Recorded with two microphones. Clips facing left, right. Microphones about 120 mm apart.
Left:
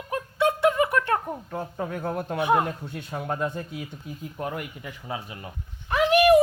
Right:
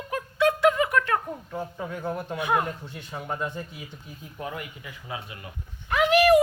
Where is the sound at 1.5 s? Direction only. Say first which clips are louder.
Left 2 dB; 50° left (ahead or behind).